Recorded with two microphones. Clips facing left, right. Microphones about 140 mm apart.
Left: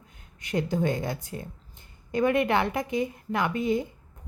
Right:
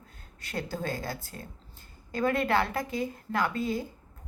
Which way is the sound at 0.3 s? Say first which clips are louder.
Left 8 dB; 20° left (ahead or behind).